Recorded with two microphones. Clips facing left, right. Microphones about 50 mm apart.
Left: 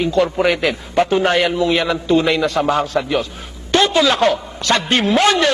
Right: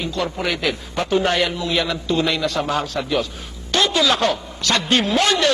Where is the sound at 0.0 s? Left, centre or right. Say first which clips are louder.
Left 8 dB; left.